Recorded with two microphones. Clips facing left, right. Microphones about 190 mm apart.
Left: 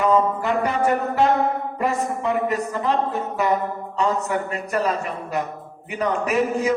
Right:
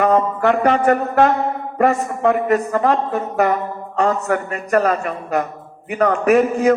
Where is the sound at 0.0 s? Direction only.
60° right (ahead or behind).